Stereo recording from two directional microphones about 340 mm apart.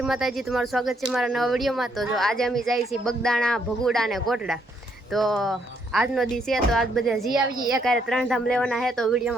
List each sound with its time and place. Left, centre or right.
0.0 s speech: centre
7.3 s speech: centre
8.0 s speech: centre